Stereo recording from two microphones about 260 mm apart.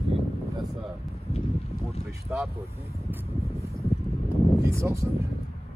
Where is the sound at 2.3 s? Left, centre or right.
Centre.